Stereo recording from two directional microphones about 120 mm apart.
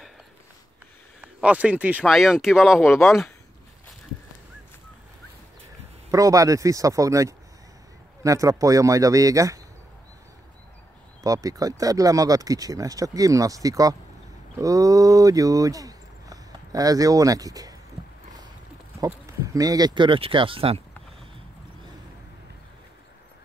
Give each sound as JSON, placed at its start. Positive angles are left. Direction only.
{"t": 1.2, "sound": "speech", "side_deg": -10}
{"t": 6.0, "sound": "speech", "side_deg": -30}
{"t": 11.2, "sound": "speech", "side_deg": -30}
{"t": 18.9, "sound": "speech", "side_deg": -30}